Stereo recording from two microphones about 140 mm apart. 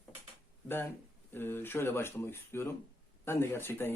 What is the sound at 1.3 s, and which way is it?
Speech, 15° left (ahead or behind).